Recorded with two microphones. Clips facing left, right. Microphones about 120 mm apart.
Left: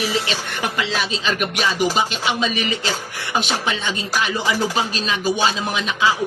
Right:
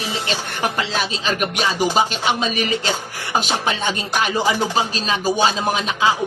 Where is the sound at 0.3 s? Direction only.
40° right (ahead or behind).